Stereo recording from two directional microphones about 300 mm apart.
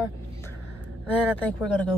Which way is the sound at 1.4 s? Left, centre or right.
Centre.